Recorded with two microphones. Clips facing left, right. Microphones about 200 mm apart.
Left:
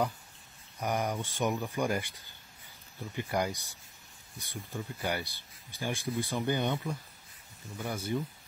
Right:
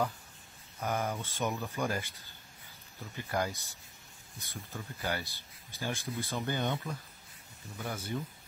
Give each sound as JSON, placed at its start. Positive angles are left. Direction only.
{"t": 0.7, "sound": "speech", "side_deg": 15}
{"t": 3.2, "sound": "speech", "side_deg": 15}